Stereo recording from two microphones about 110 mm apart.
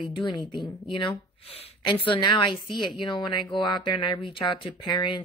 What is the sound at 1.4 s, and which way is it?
A woman's voice, 60° left (ahead or behind).